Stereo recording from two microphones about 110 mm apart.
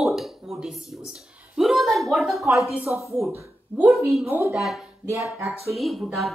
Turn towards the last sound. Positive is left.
turn(degrees=0)  # may be behind; listen again after turning